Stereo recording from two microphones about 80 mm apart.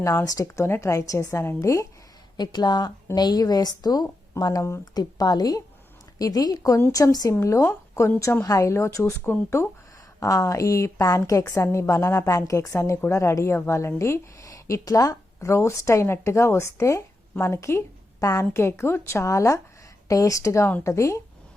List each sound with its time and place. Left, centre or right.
0.0 s speech: left
0.4 s a woman's voice: left
2.4 s a woman's voice: left
7.3 s a woman's voice: left
10.2 s a woman's voice: left